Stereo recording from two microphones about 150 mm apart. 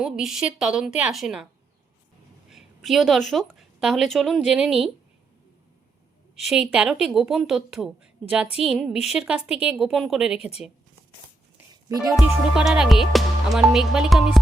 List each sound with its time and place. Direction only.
0.0 s music: centre (ahead or behind)
2.5 s a woman's voice: centre (ahead or behind)
6.5 s music: 5° right (ahead or behind)
11.9 s speech: 25° right (ahead or behind)
12.1 s music: 5° right (ahead or behind)